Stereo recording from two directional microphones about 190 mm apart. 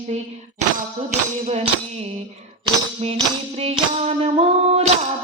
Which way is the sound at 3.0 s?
35° right (ahead or behind).